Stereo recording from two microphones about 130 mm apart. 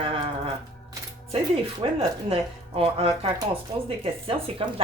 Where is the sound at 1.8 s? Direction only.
50° right (ahead or behind).